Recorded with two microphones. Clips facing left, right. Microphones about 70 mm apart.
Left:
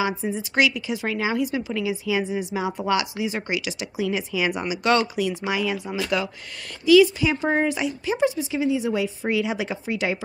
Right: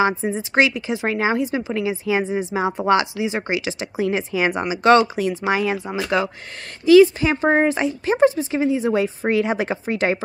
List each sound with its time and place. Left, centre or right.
0.0 s a woman's voice: right